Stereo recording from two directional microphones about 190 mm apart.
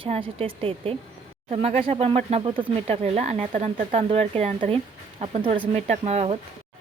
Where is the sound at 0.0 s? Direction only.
30° right (ahead or behind).